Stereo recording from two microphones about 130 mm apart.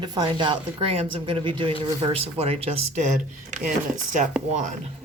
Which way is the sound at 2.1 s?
50° right (ahead or behind).